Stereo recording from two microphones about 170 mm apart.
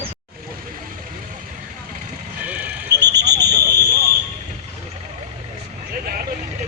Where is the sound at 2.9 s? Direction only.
80° right.